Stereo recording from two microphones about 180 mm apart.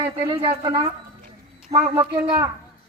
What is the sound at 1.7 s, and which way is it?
Speech, 35° right (ahead or behind).